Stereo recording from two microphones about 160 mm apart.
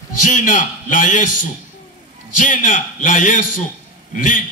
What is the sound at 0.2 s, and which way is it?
A man's voice, 50° left (ahead or behind).